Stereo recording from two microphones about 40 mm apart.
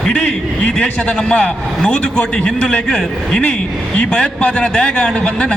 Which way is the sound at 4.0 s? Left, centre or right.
Left.